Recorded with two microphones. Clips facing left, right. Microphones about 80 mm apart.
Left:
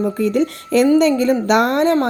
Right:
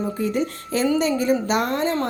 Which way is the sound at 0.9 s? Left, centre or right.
Left.